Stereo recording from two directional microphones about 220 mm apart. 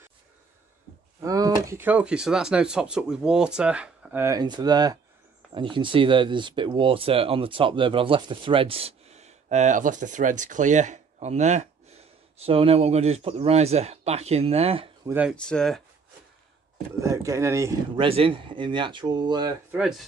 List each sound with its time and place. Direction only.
1.2 s speech: 15° right (ahead or behind)
15.0 s speech: 5° right (ahead or behind)
15.3 s speech: 5° left (ahead or behind)
17.0 s speech: 15° right (ahead or behind)
18.0 s speech: 25° right (ahead or behind)
19.7 s speech: 5° right (ahead or behind)